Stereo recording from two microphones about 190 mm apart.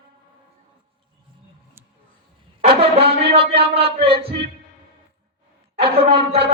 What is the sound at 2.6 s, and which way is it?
Brass instrument, 30° right (ahead or behind).